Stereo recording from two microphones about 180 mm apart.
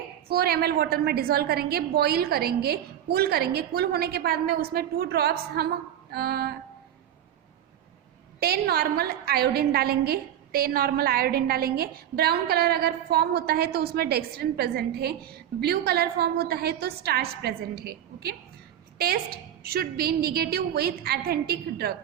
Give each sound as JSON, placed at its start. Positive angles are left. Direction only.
{"t": 0.3, "sound": "a woman's voice", "side_deg": -60}
{"t": 8.4, "sound": "a woman's voice", "side_deg": -60}